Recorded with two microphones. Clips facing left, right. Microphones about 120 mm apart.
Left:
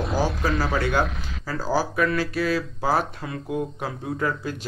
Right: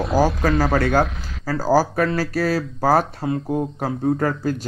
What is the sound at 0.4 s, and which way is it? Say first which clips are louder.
Speech: right 5 dB; 50° right (ahead or behind).